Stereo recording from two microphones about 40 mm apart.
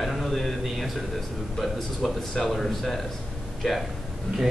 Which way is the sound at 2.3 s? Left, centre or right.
Centre.